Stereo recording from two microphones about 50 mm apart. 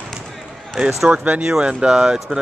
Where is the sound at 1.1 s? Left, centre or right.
Right.